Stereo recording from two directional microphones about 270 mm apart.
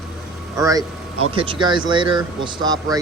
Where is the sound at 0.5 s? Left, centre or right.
Centre.